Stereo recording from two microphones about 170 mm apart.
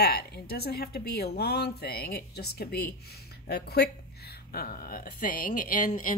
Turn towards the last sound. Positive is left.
turn(degrees=50)  # may be behind; listen again after turning